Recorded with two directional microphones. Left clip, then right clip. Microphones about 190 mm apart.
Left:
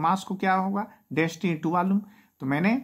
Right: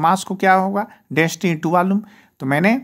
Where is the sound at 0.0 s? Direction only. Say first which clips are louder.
Right 9 dB; 40° right (ahead or behind).